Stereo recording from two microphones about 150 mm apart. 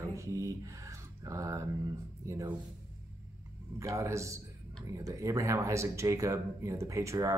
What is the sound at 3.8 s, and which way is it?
Speech, 20° right (ahead or behind).